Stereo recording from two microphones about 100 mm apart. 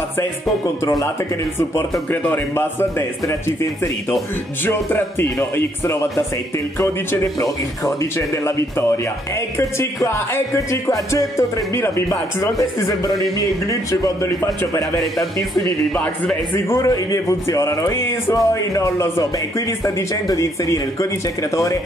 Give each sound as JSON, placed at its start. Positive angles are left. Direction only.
{"t": 1.8, "sound": "a man's voice", "side_deg": 25}
{"t": 8.5, "sound": "a man's voice", "side_deg": 30}
{"t": 9.6, "sound": "music", "side_deg": 25}
{"t": 16.5, "sound": "a man's voice", "side_deg": 25}
{"t": 16.9, "sound": "music", "side_deg": 35}